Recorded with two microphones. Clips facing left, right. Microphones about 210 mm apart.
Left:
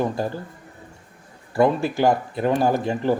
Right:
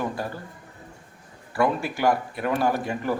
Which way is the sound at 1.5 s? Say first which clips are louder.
Left 5 dB; 25° left (ahead or behind).